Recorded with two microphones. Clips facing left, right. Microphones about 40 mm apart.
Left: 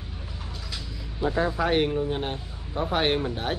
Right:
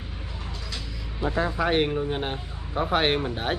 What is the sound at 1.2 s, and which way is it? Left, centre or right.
Speech, centre.